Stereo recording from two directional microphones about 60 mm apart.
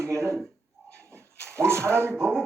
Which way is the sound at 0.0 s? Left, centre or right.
Right.